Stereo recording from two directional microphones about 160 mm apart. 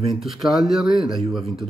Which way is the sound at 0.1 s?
Centre (ahead or behind).